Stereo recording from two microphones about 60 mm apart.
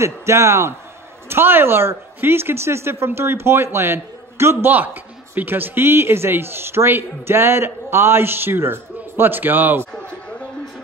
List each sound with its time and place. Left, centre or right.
0.0 s speech: right
1.3 s speech: right
4.7 s a man's voice: right